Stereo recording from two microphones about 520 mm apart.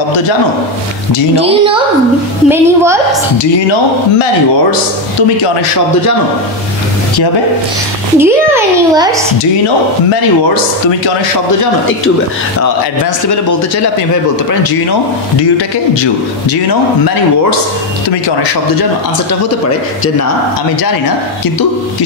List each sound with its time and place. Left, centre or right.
1.3 s a child's voice: centre
8.2 s a child's voice: centre
15.5 s a man's voice: left